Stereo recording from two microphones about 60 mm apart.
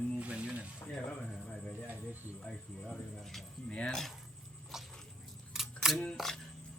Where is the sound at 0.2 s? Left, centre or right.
Centre.